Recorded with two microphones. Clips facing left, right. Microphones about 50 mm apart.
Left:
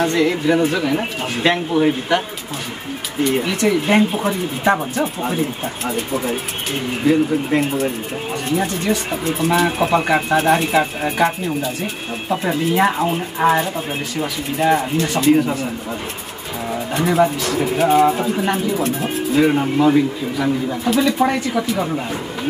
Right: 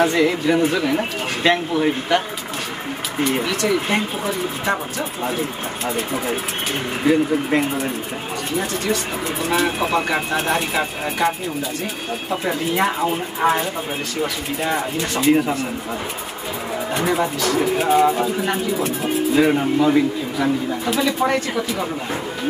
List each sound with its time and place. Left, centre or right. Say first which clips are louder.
0.0 s speech: even; centre
3.4 s speech: left 3 dB; centre
7.1 s speech: left 1 dB; centre
9.5 s speech: left 3 dB; centre
16.9 s speech: left 5 dB; centre
21.2 s speech: left 2 dB; centre